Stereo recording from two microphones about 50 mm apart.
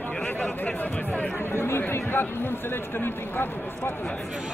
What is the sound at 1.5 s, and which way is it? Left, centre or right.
Speech, left.